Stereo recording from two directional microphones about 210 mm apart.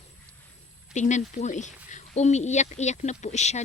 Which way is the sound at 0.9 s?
35° left (ahead or behind).